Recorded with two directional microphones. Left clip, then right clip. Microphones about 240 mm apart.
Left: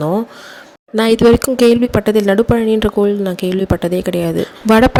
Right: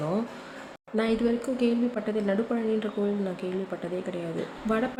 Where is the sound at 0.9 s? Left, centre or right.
Left.